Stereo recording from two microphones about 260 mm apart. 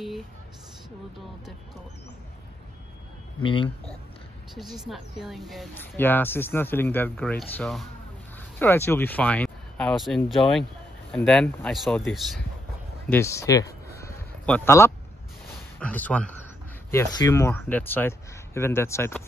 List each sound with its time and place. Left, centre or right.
3.4 s speech: centre
4.6 s speech: centre
13.1 s speech: centre
13.9 s a sound: centre
15.8 s speech: centre